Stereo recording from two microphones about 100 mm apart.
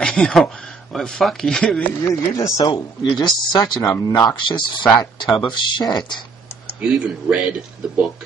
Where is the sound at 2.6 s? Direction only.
50° left (ahead or behind).